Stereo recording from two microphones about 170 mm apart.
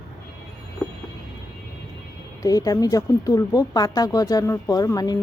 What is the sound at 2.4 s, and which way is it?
Speech, 20° left (ahead or behind).